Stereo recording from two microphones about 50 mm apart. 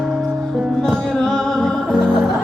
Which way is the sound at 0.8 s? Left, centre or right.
Centre.